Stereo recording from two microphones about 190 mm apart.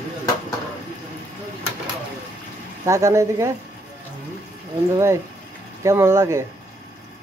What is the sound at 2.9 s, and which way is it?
Speech, 15° right (ahead or behind).